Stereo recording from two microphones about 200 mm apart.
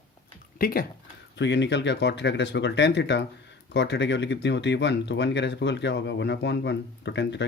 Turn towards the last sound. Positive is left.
turn(degrees=60)  # may be behind; listen again after turning